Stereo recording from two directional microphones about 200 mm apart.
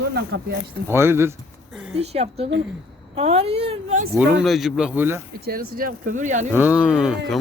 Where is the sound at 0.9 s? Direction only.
10° right (ahead or behind).